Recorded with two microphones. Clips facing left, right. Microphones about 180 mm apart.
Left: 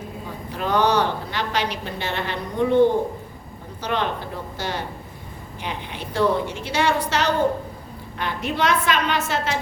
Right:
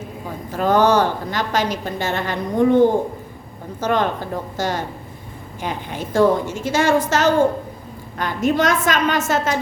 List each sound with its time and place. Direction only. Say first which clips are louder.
0.5 s a woman's voice: right 5 dB; 45° right (ahead or behind)
3.8 s a woman's voice: right 5 dB; 45° right (ahead or behind)